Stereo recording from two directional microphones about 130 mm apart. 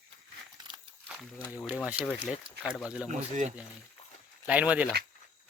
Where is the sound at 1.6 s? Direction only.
5° left (ahead or behind).